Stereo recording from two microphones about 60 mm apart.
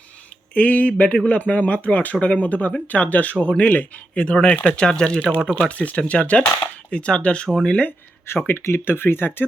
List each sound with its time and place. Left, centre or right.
0.5 s speech: left
7.4 s speech: centre
7.7 s speech: left
8.4 s speech: left